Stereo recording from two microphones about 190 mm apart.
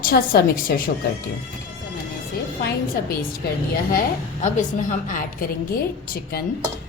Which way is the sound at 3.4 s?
55° left (ahead or behind).